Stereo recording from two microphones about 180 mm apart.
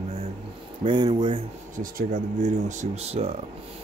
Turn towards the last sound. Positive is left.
turn(degrees=-35)  # may be behind; listen again after turning